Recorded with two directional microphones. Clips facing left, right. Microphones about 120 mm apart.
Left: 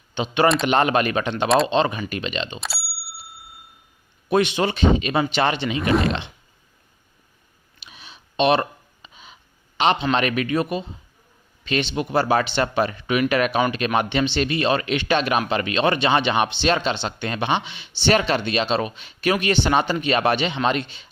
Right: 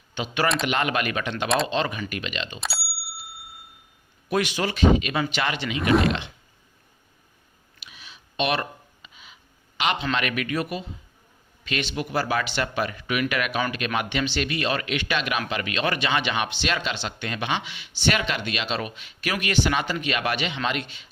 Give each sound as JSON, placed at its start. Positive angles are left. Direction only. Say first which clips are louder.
{"t": 0.1, "sound": "speech", "louder": "left 6 dB", "side_deg": 25}
{"t": 4.3, "sound": "speech", "louder": "left 5 dB", "side_deg": 25}
{"t": 5.9, "sound": "speech", "louder": "right 1 dB", "side_deg": 0}
{"t": 7.8, "sound": "a sound", "louder": "left 3 dB", "side_deg": 30}
{"t": 11.6, "sound": "speech", "louder": "left 5 dB", "side_deg": 30}